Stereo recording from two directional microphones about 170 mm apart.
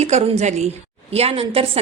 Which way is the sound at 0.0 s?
40° right (ahead or behind).